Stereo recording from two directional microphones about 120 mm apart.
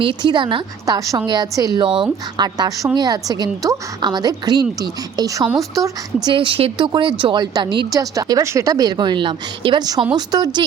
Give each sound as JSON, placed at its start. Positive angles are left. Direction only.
{"t": 0.0, "sound": "speech", "side_deg": -40}
{"t": 6.2, "sound": "speech", "side_deg": -45}